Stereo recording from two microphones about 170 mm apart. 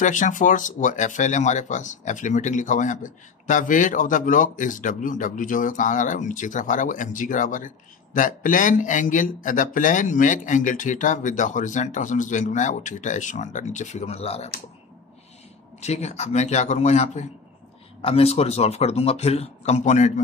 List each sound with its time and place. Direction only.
0.0 s speech: 50° left (ahead or behind)
15.8 s a man's voice: 40° left (ahead or behind)